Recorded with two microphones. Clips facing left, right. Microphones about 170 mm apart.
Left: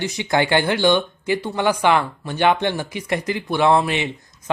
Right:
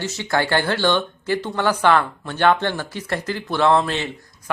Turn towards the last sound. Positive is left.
turn(degrees=15)  # may be behind; listen again after turning